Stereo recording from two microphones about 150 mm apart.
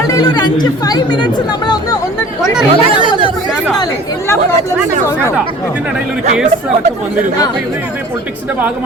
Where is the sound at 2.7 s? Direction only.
35° right (ahead or behind).